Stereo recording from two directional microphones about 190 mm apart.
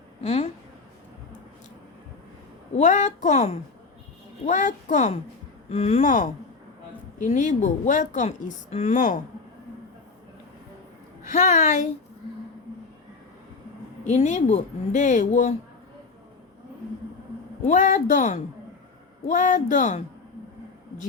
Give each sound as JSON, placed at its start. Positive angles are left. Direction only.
{"t": 0.2, "sound": "a sound", "side_deg": 35}
{"t": 2.7, "sound": "a woman's voice", "side_deg": 40}
{"t": 11.3, "sound": "a woman's voice", "side_deg": 40}
{"t": 14.0, "sound": "a woman's voice", "side_deg": 40}
{"t": 17.6, "sound": "a woman's voice", "side_deg": 40}